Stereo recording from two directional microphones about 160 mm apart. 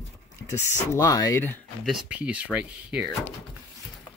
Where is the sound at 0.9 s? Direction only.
20° left (ahead or behind).